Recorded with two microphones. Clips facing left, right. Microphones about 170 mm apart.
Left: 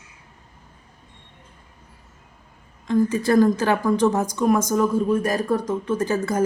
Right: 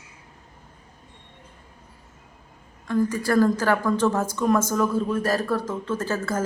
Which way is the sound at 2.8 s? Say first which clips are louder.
Left 3 dB; 20° left (ahead or behind).